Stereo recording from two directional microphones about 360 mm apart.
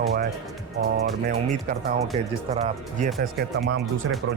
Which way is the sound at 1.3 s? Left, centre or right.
Right.